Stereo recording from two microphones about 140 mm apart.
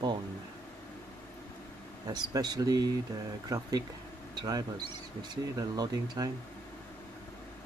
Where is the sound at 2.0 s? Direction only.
30° right (ahead or behind).